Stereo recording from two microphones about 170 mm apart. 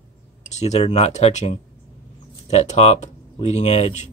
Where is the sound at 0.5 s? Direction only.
40° left (ahead or behind).